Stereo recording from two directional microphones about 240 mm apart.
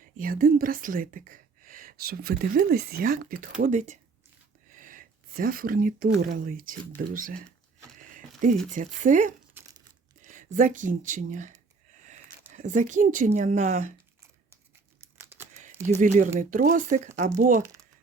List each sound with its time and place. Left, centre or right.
0.2 s speech: right
8.7 s speech: right
9.6 s crumpling: centre
10.2 s speech: right
12.5 s speech: right
16.0 s speech: right